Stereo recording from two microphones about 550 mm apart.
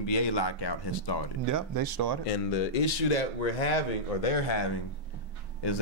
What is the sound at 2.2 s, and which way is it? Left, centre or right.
Speech, left.